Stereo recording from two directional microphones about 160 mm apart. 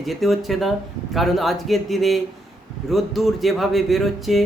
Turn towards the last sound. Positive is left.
turn(degrees=0)  # may be behind; listen again after turning